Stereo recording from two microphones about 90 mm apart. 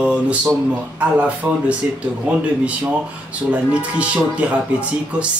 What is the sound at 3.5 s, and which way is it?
Speech, 15° right (ahead or behind).